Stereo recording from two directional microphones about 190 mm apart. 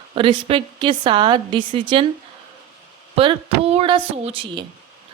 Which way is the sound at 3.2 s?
30° right (ahead or behind).